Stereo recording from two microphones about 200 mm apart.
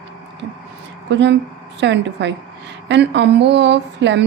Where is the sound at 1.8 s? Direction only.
60° right (ahead or behind).